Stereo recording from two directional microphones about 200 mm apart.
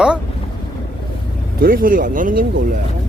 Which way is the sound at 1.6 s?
45° right (ahead or behind).